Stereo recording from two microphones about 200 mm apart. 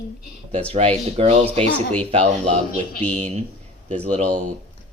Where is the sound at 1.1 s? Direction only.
35° right (ahead or behind).